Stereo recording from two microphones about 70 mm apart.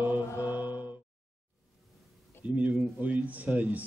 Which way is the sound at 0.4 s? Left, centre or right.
Right.